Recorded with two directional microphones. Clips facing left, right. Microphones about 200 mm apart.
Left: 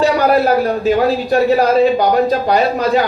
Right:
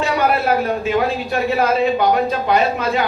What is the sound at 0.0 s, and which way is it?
A man's voice, 35° left (ahead or behind).